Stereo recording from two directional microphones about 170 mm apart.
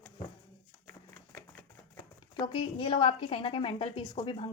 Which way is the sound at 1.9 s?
25° left (ahead or behind).